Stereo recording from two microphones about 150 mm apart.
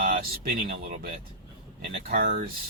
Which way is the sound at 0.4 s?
85° right.